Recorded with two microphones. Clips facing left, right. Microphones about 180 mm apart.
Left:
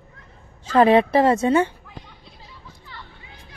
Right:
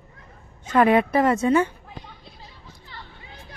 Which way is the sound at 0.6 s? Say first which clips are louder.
Left 3 dB; 30° left (ahead or behind).